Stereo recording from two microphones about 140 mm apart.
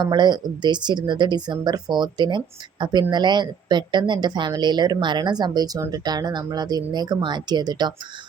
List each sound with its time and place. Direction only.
0.0 s a woman's voice: 30° right (ahead or behind)